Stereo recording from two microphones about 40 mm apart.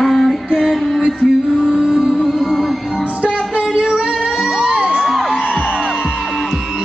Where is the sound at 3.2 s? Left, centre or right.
Right.